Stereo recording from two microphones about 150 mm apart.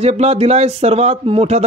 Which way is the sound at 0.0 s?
45° right (ahead or behind).